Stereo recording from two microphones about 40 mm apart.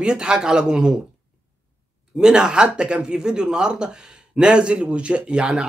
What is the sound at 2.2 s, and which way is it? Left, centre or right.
Speech, centre.